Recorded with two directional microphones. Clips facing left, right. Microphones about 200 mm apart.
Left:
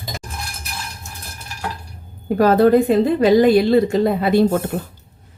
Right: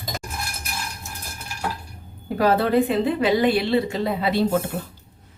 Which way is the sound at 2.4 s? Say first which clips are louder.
Left 6 dB; 45° left (ahead or behind).